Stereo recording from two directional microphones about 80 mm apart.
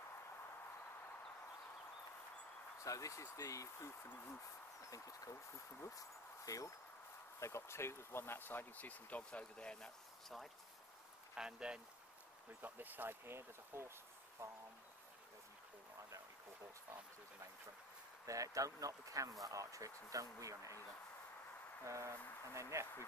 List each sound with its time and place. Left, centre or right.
2.8 s speech: left
4.1 s speech: left
4.8 s speech: left; by 9.8 s centre
11.3 s speech: centre
12.6 s speech: right
18.2 s speech: right
21.8 s speech: right